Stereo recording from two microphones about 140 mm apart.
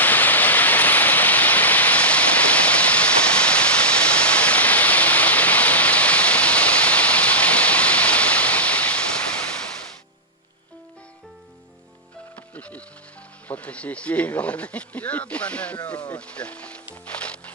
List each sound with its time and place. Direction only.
0.0 s a sound: 10° left (ahead or behind)
12.4 s music: 10° left (ahead or behind)
13.5 s speech: 10° left (ahead or behind)
17.1 s music: 10° left (ahead or behind)